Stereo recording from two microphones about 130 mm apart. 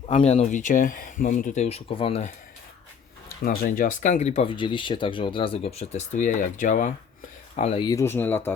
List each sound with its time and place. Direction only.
0.2 s speech: 50° left (ahead or behind)
0.5 s speech: 80° left
1.6 s speech: 50° left (ahead or behind)
3.4 s speech: 90° left; by 4.4 s 60° left (ahead or behind)
4.4 s speech: 40° left (ahead or behind); by 6.9 s 75° left (ahead or behind)
7.5 s speech: 60° left (ahead or behind)
7.8 s speech: 30° left (ahead or behind)
8.0 s speech: 15° left (ahead or behind)